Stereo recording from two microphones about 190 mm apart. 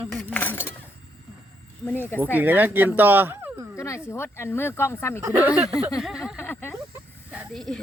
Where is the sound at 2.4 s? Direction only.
10° right (ahead or behind).